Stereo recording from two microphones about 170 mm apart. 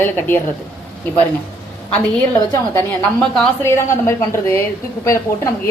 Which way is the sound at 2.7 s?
5° left (ahead or behind).